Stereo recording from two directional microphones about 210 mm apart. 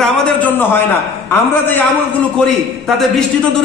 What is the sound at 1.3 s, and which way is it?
Speech, 10° left (ahead or behind).